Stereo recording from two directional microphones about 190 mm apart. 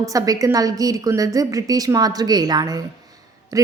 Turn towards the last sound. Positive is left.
turn(degrees=-20)  # may be behind; listen again after turning